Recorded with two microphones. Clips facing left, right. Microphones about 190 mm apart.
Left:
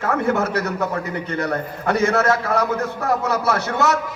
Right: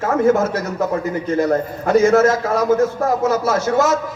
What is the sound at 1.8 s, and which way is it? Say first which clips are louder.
A man's voice: right 5 dB; 65° left (ahead or behind).